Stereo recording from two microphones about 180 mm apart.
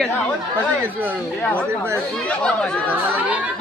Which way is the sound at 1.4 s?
5° left (ahead or behind).